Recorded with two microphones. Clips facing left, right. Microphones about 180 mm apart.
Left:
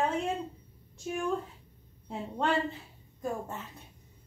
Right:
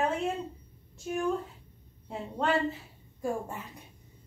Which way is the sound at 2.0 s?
Centre (ahead or behind).